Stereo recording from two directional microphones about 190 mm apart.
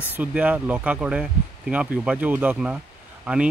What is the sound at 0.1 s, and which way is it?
Speech, 10° right (ahead or behind).